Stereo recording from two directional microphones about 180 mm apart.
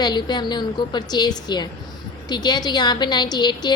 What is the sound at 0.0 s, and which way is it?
A woman's voice, 25° left (ahead or behind).